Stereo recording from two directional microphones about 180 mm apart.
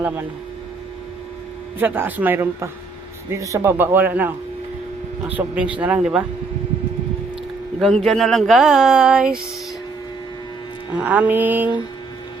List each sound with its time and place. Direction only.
1.8 s a man's voice: 10° right (ahead or behind)
7.8 s speech: 5° left (ahead or behind)
10.9 s a man's voice: 10° right (ahead or behind)